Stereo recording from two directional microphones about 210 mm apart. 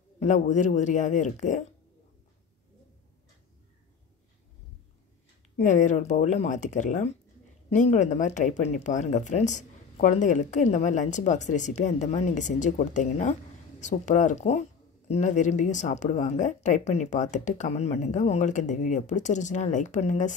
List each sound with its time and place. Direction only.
0.2 s speech: 35° left (ahead or behind)
5.7 s speech: 35° left (ahead or behind)